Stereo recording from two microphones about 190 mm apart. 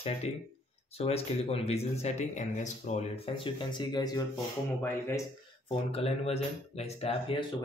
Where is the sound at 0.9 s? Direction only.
35° left (ahead or behind).